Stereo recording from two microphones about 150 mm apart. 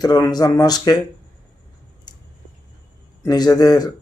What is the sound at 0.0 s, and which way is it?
Speech, 25° left (ahead or behind).